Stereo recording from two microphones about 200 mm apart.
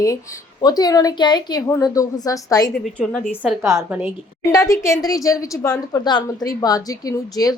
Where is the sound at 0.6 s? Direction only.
20° left (ahead or behind).